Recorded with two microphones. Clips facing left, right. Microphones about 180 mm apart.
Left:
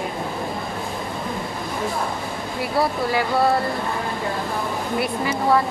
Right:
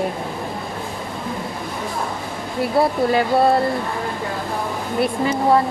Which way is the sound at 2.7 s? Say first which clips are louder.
Right 4 dB; 25° right (ahead or behind).